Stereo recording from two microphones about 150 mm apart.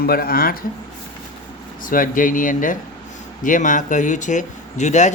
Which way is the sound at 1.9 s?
65° left (ahead or behind).